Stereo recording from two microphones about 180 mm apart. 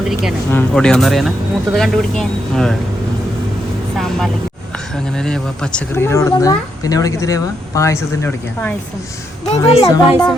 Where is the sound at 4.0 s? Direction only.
Centre (ahead or behind).